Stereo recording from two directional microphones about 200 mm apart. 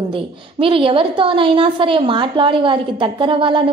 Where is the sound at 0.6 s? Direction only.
25° right (ahead or behind).